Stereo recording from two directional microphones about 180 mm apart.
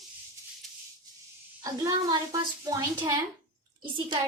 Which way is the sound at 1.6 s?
20° right (ahead or behind).